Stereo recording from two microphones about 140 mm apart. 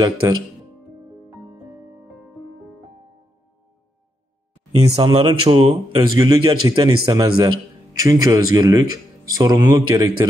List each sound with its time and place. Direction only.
5.0 s a man's voice: 40° right (ahead or behind)